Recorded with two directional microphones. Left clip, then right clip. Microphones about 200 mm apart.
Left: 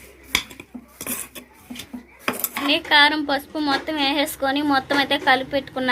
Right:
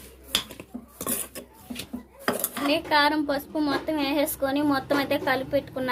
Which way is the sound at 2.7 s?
Centre (ahead or behind).